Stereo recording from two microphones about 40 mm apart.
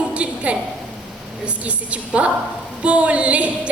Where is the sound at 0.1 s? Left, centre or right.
Right.